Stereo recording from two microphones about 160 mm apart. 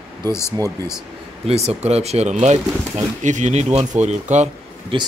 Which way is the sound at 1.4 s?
40° right (ahead or behind).